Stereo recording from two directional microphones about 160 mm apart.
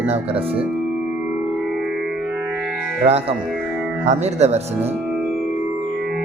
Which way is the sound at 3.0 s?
40° right (ahead or behind).